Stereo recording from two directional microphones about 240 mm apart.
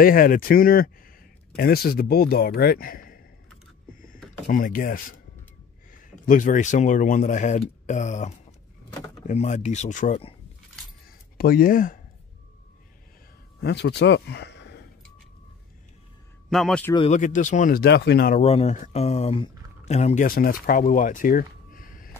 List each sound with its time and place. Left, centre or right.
0.0 s speech: left
4.5 s speech: left
11.3 s speech: left
13.6 s speech: left
16.4 s a man's voice: centre
16.9 s speech: left
18.4 s speech: left